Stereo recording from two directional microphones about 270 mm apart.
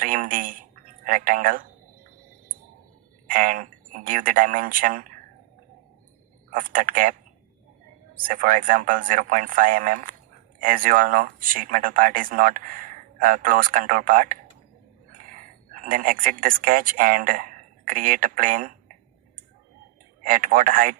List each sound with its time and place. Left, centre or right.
0.0 s speech: right
3.2 s speech: right
6.5 s speech: right
8.2 s speech: right
20.2 s speech: right